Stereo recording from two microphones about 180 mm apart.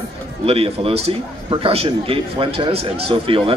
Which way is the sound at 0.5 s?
35° right (ahead or behind).